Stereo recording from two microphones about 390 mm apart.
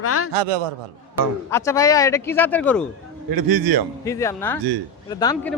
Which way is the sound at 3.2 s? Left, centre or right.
Right.